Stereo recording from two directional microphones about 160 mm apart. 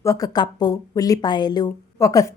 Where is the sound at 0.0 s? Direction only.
20° left (ahead or behind).